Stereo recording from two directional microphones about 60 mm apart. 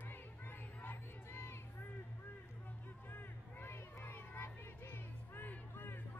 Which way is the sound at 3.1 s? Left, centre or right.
Left.